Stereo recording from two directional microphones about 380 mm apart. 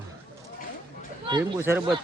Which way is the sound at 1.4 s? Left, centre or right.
Centre.